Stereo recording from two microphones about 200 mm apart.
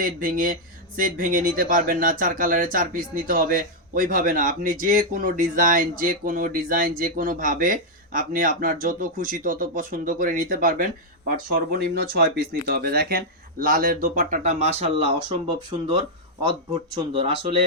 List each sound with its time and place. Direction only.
0.0 s speech: 45° right (ahead or behind); by 17.3 s 25° right (ahead or behind)